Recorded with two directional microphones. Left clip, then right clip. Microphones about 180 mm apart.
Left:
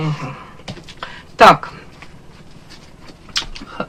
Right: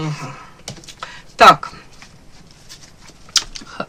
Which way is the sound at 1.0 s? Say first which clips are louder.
Even; 20° right (ahead or behind).